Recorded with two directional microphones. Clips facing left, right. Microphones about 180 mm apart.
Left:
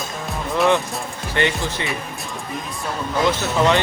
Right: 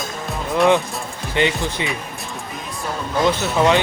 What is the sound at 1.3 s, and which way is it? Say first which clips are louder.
Speech: right 2 dB; 15° right (ahead or behind).